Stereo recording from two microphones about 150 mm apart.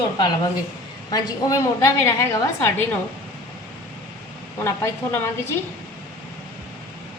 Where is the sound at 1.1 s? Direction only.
25° left (ahead or behind).